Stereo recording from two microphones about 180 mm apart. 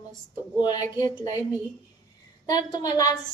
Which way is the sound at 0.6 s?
25° left (ahead or behind).